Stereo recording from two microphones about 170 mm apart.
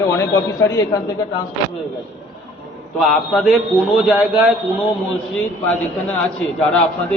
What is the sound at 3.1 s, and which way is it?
A man's voice, centre (ahead or behind).